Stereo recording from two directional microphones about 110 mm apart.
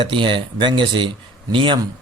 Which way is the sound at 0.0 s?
50° right (ahead or behind).